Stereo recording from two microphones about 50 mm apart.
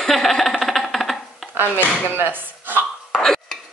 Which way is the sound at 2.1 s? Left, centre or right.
Right.